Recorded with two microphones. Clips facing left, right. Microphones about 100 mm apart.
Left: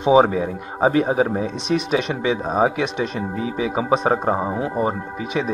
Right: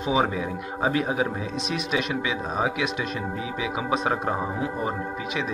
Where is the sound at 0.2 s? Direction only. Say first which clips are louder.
Left 7 dB; 50° left (ahead or behind).